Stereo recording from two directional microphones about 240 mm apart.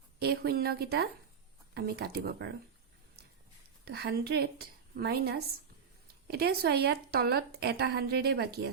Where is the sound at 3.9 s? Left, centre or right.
Right.